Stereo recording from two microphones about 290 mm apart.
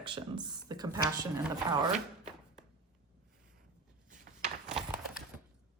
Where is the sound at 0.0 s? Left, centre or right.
Centre.